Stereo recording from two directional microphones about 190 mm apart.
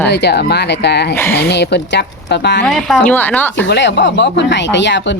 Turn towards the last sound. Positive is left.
turn(degrees=70)  # may be behind; listen again after turning